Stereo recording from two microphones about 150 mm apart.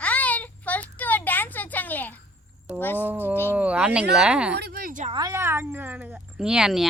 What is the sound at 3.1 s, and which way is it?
Speech, 15° right (ahead or behind).